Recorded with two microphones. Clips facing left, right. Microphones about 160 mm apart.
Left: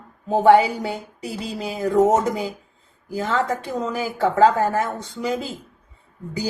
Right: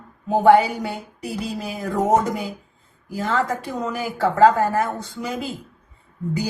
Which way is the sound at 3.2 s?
25° left (ahead or behind).